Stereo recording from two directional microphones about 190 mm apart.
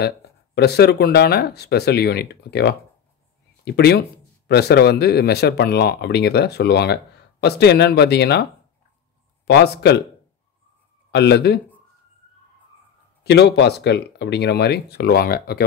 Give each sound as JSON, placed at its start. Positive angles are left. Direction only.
{"t": 0.6, "sound": "speech", "side_deg": 60}
{"t": 9.5, "sound": "speech", "side_deg": 60}
{"t": 11.1, "sound": "speech", "side_deg": 65}
{"t": 13.2, "sound": "speech", "side_deg": 60}